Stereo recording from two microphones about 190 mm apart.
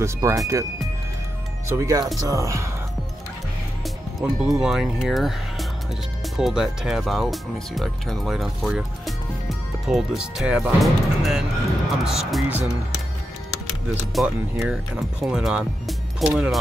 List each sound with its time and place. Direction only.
0.0 s speech: 15° right (ahead or behind)
1.7 s speech: 15° right (ahead or behind)
4.2 s speech: centre (ahead or behind)
14.1 s speech: 5° right (ahead or behind)